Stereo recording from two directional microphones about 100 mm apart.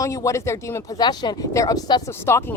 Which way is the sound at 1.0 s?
45° left (ahead or behind).